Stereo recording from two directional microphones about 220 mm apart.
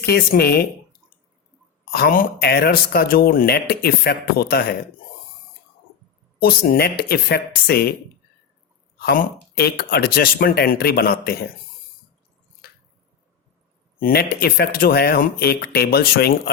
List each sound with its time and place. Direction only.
0.0 s speech: 45° left (ahead or behind)
1.9 s speech: 40° left (ahead or behind)
6.4 s speech: 45° left (ahead or behind)
9.0 s speech: 45° left (ahead or behind)
14.0 s speech: 45° left (ahead or behind)